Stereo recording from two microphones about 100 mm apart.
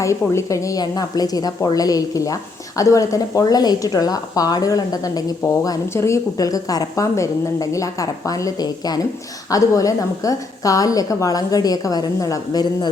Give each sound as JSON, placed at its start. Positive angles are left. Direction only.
{"t": 0.0, "sound": "speech", "side_deg": 30}